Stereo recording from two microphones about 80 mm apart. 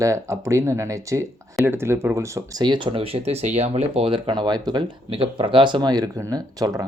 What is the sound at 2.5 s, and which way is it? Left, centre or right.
Speech, right.